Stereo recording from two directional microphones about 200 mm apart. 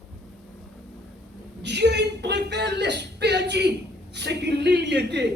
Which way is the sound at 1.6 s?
60° right (ahead or behind).